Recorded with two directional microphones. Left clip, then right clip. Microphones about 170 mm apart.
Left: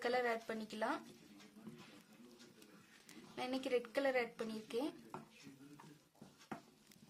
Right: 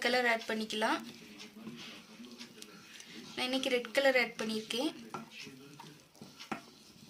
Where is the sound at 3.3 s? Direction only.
30° left (ahead or behind).